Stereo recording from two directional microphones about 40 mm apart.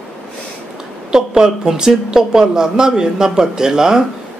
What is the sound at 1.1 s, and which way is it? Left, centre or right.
Speech, centre.